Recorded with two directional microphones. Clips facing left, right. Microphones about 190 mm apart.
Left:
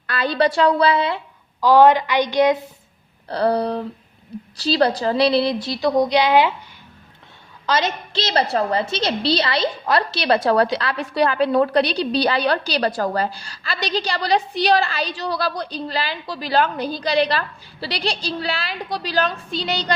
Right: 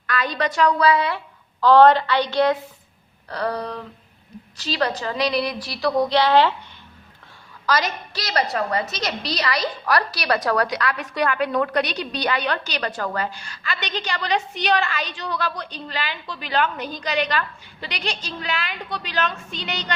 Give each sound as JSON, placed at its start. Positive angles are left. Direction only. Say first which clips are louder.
{"t": 0.1, "sound": "a woman's voice", "louder": "left 5 dB", "side_deg": 30}
{"t": 1.6, "sound": "a woman's voice", "louder": "even", "side_deg": 10}
{"t": 3.2, "sound": "a woman's voice", "louder": "left 7 dB", "side_deg": 30}
{"t": 7.7, "sound": "a woman's voice", "louder": "left 2 dB", "side_deg": 25}